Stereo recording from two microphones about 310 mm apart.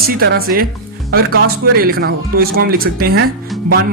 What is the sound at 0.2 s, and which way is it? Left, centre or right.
Speech, right.